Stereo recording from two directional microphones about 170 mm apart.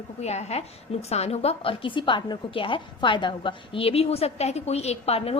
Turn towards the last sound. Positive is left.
turn(degrees=35)  # may be behind; listen again after turning